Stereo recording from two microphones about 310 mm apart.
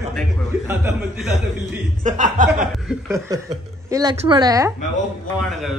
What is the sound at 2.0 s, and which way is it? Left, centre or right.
Speech, right.